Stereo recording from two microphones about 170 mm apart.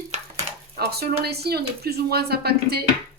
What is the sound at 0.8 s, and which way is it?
Speech, 65° right (ahead or behind).